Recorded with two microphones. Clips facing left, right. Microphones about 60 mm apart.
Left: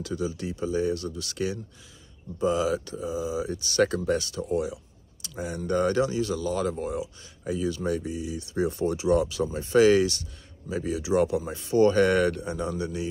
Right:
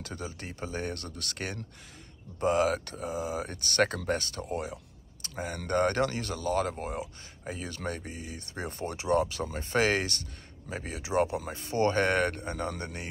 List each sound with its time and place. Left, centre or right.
0.0 s speech: right